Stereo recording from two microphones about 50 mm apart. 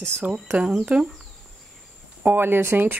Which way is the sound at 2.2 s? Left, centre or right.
Right.